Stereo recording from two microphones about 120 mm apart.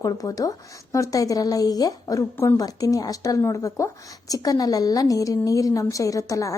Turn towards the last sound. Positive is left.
turn(degrees=25)  # may be behind; listen again after turning